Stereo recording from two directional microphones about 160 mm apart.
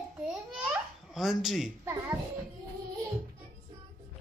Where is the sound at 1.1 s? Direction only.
Centre (ahead or behind).